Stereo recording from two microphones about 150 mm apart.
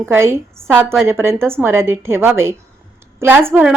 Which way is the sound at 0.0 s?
15° right (ahead or behind).